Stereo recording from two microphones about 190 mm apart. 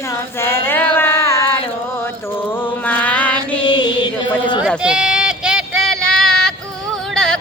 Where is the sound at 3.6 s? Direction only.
25° left (ahead or behind).